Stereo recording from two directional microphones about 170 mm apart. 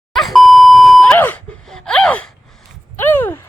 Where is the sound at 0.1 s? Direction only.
Centre (ahead or behind).